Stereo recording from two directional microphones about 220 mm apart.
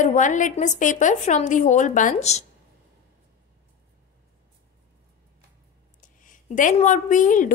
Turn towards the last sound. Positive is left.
turn(degrees=35)  # may be behind; listen again after turning